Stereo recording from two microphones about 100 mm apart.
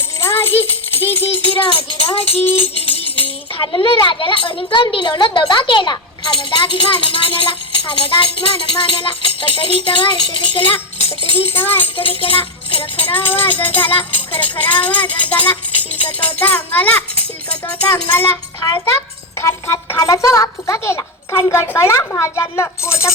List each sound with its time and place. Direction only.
0.2 s music: 25° left (ahead or behind)
1.5 s speech: 60° left (ahead or behind)
11.4 s speech: 20° left (ahead or behind)
12.0 s speech: 65° left (ahead or behind)
13.1 s speech: 20° left (ahead or behind)
13.6 s music: 20° left (ahead or behind)
15.3 s speech: 15° left (ahead or behind)